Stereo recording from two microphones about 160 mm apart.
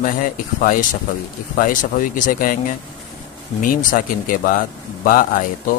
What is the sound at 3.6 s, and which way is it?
A man's voice, 60° left (ahead or behind).